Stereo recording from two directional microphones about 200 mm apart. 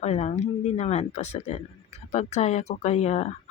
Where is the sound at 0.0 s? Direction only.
30° left (ahead or behind).